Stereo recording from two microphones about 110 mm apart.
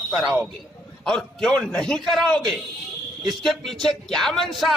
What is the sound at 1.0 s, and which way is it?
A man's voice, 5° left (ahead or behind).